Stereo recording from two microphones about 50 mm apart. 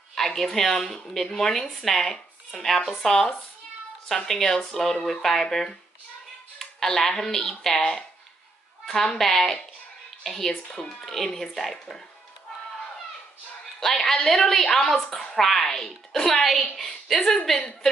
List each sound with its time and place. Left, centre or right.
0.1 s speech: centre
9.2 s speech: centre
14.0 s speech: centre
15.3 s a woman's voice: centre